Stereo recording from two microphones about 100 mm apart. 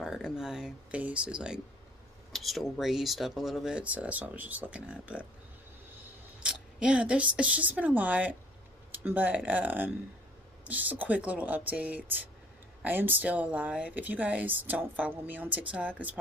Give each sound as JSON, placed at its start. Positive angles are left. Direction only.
{"t": 0.0, "sound": "speech", "side_deg": -5}
{"t": 3.8, "sound": "speech", "side_deg": -15}
{"t": 6.4, "sound": "speech", "side_deg": -10}